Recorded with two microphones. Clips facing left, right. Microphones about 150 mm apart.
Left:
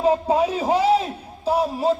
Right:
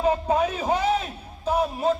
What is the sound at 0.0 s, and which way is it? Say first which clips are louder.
A man's voice: left 3 dB; 30° left (ahead or behind).